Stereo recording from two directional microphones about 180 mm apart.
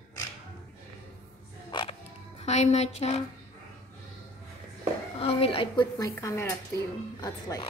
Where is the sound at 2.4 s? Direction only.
40° left (ahead or behind).